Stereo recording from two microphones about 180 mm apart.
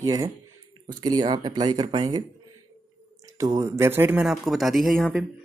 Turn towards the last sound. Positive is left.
turn(degrees=0)  # may be behind; listen again after turning